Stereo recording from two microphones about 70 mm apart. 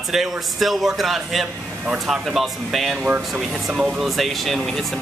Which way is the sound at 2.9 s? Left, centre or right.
Centre.